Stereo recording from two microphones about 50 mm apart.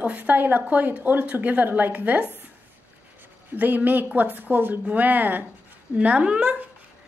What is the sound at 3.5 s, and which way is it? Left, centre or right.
A woman's voice, right.